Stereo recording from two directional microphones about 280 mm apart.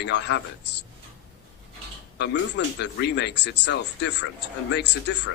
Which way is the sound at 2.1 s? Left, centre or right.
Left.